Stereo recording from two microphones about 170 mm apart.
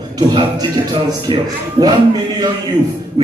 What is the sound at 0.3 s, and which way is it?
Speech, 30° right (ahead or behind).